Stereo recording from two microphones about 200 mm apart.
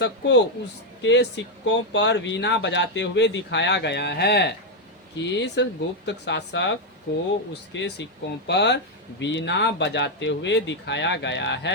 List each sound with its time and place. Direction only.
0.0 s speech: 65° left (ahead or behind)